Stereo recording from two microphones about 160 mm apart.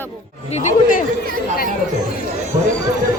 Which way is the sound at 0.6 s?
55° left (ahead or behind).